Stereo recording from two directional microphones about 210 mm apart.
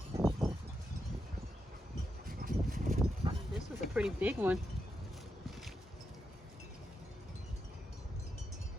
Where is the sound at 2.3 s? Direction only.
45° right (ahead or behind).